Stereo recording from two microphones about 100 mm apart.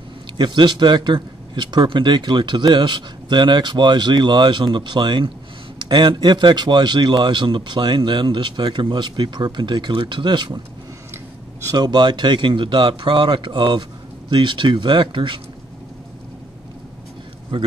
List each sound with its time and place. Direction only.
0.4 s a man's voice: 50° right (ahead or behind)
11.6 s a man's voice: 40° right (ahead or behind)